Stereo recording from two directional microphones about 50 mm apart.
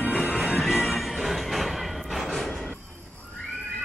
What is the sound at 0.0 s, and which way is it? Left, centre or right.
Music, centre.